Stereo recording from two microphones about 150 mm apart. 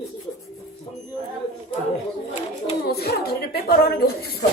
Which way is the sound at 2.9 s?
90° left.